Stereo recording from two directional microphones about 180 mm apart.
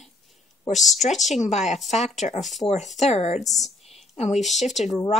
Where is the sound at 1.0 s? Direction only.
40° left (ahead or behind).